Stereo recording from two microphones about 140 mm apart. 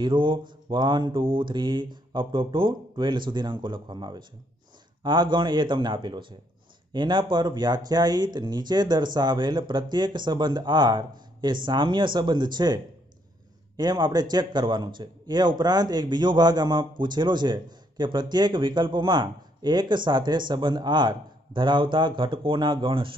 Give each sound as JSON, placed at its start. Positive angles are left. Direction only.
{"t": 0.0, "sound": "a man's voice", "side_deg": -35}